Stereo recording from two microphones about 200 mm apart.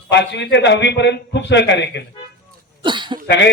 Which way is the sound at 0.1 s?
60° left (ahead or behind).